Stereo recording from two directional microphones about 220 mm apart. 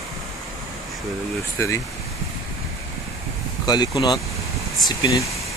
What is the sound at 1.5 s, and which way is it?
Speech, 10° left (ahead or behind).